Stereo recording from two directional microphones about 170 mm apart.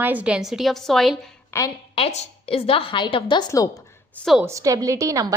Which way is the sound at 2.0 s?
35° left (ahead or behind).